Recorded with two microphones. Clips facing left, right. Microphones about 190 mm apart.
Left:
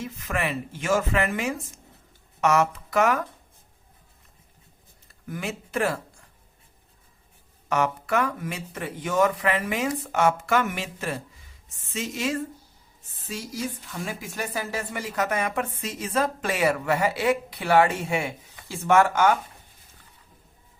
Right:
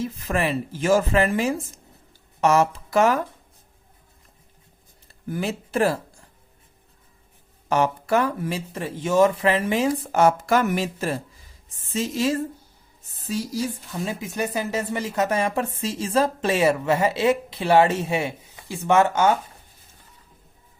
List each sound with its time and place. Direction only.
0.0 s speech: 35° right (ahead or behind)
5.3 s speech: 35° right (ahead or behind)
7.7 s speech: 30° right (ahead or behind)
14.0 s speech: 20° right (ahead or behind)